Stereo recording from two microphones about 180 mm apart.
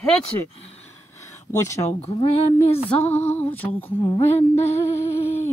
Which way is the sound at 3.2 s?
10° left (ahead or behind).